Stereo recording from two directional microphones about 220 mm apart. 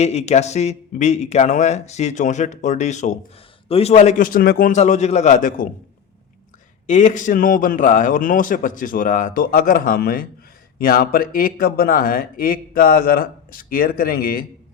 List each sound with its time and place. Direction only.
0.0 s speech: 30° left (ahead or behind)
6.8 s speech: 35° left (ahead or behind)